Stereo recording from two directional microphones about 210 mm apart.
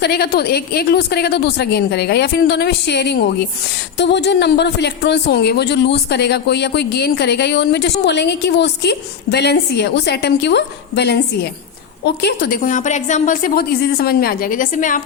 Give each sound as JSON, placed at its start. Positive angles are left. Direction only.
{"t": 0.0, "sound": "speech", "side_deg": 50}